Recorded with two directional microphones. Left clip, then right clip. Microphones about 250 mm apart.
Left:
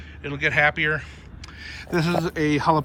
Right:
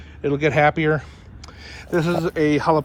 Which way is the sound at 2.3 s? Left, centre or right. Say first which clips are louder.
Right 3 dB; centre.